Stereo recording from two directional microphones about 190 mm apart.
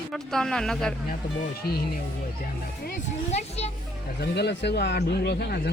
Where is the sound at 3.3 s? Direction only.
35° left (ahead or behind).